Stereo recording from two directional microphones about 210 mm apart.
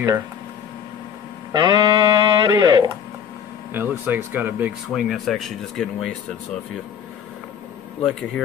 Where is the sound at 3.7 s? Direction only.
10° right (ahead or behind).